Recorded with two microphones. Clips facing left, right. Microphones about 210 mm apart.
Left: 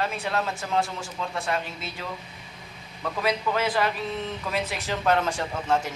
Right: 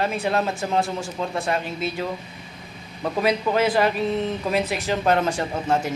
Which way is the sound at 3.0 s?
25° right (ahead or behind).